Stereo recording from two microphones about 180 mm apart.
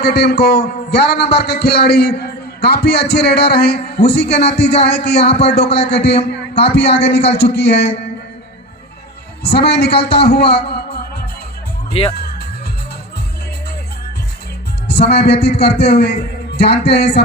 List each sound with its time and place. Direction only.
0.0 s a man's voice: 65° left (ahead or behind)
9.4 s a man's voice: 65° left (ahead or behind)
11.9 s speech: 30° left (ahead or behind)
12.1 s music: 60° left (ahead or behind)
14.8 s a man's voice: 65° left (ahead or behind)